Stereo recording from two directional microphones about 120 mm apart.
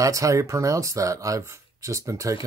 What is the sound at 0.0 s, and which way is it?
Speech, 25° right (ahead or behind).